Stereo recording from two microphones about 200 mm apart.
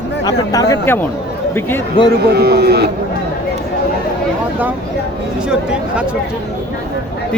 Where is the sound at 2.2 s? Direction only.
55° right (ahead or behind).